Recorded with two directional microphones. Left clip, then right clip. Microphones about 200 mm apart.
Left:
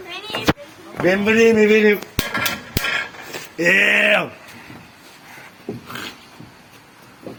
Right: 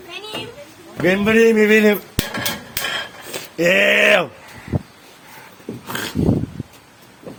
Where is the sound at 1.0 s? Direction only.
40° right (ahead or behind).